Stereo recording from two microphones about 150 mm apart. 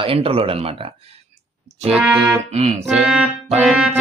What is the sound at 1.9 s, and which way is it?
Music, 5° right (ahead or behind).